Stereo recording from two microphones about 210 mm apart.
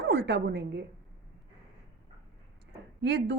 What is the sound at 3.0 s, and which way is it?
Speech, 55° right (ahead or behind).